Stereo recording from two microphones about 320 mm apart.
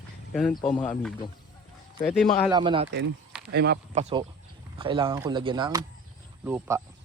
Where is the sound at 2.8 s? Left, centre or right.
Right; by 6.8 s centre.